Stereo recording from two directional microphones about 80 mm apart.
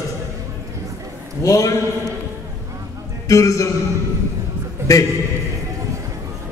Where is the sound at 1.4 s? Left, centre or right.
Left.